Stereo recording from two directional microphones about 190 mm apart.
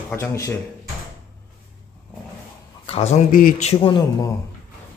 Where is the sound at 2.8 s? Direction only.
35° left (ahead or behind).